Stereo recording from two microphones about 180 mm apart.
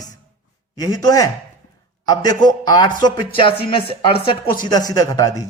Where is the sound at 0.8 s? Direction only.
20° left (ahead or behind).